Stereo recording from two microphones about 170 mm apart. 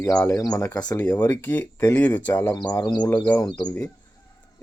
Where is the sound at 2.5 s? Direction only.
25° left (ahead or behind).